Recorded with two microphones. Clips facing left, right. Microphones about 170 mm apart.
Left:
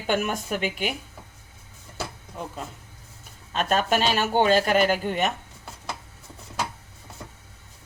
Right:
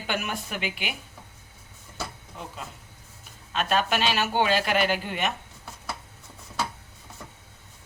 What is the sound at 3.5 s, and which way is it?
A woman's voice, 45° left (ahead or behind).